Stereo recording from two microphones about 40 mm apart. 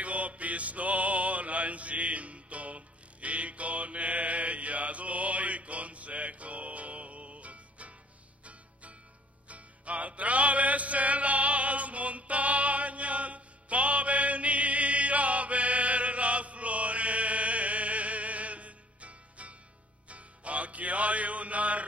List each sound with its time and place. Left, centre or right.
0.0 s mantra: right
9.5 s music: right